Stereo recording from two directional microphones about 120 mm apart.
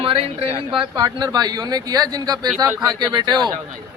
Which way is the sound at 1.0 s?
35° right (ahead or behind).